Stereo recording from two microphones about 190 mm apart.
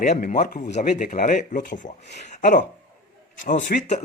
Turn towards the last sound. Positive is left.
turn(degrees=40)  # may be behind; listen again after turning